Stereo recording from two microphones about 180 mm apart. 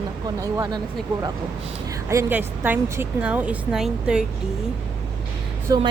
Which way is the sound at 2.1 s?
15° right (ahead or behind).